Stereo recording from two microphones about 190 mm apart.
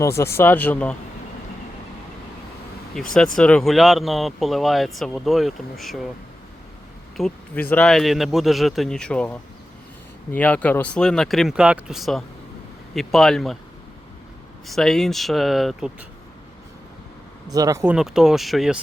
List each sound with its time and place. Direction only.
0.0 s speech: 15° left (ahead or behind)
3.0 s speech: centre (ahead or behind)
7.2 s speech: 5° left (ahead or behind)
14.7 s speech: centre (ahead or behind)
17.5 s speech: 20° right (ahead or behind)
17.9 s speech: 5° right (ahead or behind)